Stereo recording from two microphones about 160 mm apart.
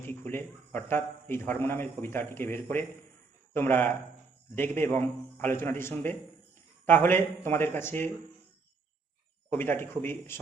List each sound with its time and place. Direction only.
0.1 s a man's voice: 10° left (ahead or behind)
9.5 s a man's voice: 15° left (ahead or behind)